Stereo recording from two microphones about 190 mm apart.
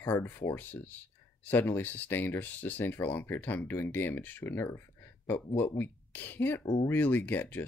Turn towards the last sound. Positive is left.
turn(degrees=10)  # may be behind; listen again after turning